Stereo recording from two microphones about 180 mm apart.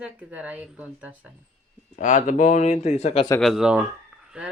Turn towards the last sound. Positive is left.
turn(degrees=-5)  # may be behind; listen again after turning